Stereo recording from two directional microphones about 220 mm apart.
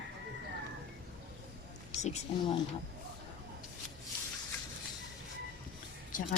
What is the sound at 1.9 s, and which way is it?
Speech, 30° left (ahead or behind).